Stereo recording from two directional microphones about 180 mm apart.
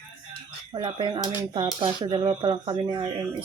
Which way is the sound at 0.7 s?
30° right (ahead or behind).